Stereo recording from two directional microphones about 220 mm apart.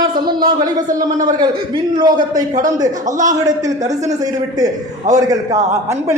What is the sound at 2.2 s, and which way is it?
Speech, 35° right (ahead or behind).